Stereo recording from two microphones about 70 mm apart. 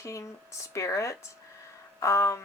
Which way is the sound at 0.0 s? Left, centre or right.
Left.